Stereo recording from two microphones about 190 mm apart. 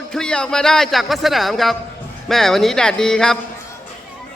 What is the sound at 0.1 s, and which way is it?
Speech, 5° left (ahead or behind).